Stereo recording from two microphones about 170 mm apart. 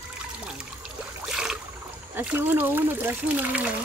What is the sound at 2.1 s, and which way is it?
Speech, 10° right (ahead or behind).